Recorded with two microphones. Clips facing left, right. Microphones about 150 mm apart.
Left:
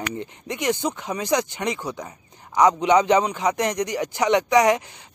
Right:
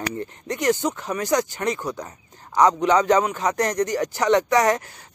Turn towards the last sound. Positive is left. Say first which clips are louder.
# left 1 dB
turn(degrees=20)  # may be behind; listen again after turning